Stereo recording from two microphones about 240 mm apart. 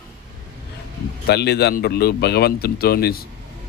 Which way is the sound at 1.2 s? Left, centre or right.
Left.